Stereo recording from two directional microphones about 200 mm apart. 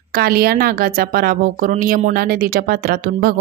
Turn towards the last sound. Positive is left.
turn(degrees=-45)  # may be behind; listen again after turning